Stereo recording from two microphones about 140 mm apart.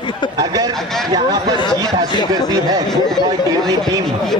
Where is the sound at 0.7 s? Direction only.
Centre (ahead or behind).